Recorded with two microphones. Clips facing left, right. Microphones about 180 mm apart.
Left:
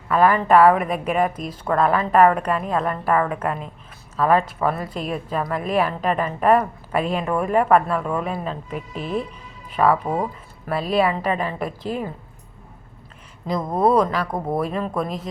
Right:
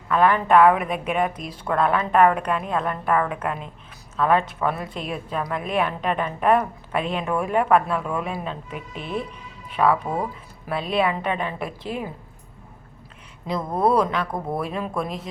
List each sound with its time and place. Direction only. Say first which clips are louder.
0.1 s a woman's voice: left 2 dB; 5° left (ahead or behind)
13.6 s speech: left 2 dB; 15° left (ahead or behind)
13.8 s a woman's voice: left 2 dB; centre (ahead or behind)
14.3 s speech: left 3 dB; 20° left (ahead or behind)
14.6 s a woman's voice: left 3 dB; centre (ahead or behind)